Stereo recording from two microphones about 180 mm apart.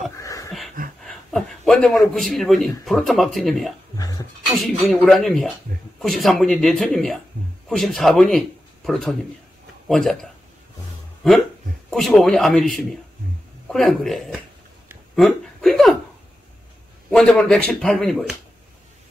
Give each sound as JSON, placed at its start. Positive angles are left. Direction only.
{"t": 0.2, "sound": "a sound", "side_deg": 15}
{"t": 1.0, "sound": "a sound", "side_deg": 0}
{"t": 2.1, "sound": "speech", "side_deg": 0}
{"t": 4.0, "sound": "dog", "side_deg": 20}
{"t": 4.6, "sound": "speech", "side_deg": 0}
{"t": 11.9, "sound": "speech", "side_deg": 0}
{"t": 17.1, "sound": "speech", "side_deg": 5}